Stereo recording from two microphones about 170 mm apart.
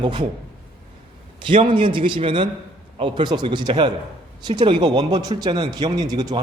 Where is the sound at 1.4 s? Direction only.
30° right (ahead or behind).